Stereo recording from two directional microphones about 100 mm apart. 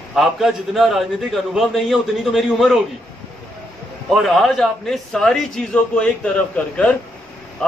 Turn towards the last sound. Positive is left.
turn(degrees=10)  # may be behind; listen again after turning